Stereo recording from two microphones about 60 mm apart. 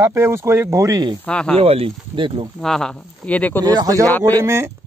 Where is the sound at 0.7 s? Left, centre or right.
Right.